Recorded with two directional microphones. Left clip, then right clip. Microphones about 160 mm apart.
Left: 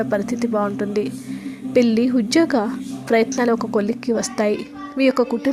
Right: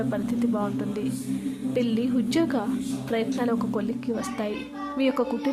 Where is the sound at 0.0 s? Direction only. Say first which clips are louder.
Left 6 dB; 40° left (ahead or behind).